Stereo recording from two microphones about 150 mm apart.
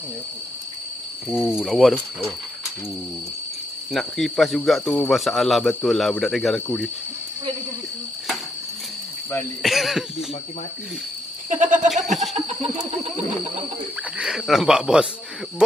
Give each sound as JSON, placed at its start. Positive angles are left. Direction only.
{"t": 1.3, "sound": "speech", "side_deg": -5}
{"t": 3.9, "sound": "speech", "side_deg": 0}
{"t": 9.6, "sound": "speech", "side_deg": 0}
{"t": 11.4, "sound": "a sound", "side_deg": -55}
{"t": 11.9, "sound": "a sound", "side_deg": 0}
{"t": 14.1, "sound": "speech", "side_deg": -5}